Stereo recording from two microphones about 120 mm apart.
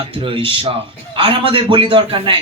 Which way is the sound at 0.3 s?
45° right (ahead or behind).